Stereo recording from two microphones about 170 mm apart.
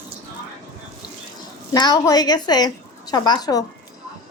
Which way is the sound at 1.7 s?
25° left (ahead or behind).